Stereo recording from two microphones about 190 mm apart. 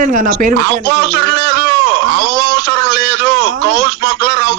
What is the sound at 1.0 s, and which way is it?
Speech, 60° right (ahead or behind).